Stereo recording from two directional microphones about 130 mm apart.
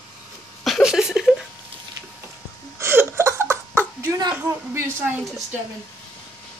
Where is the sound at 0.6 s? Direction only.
Centre (ahead or behind).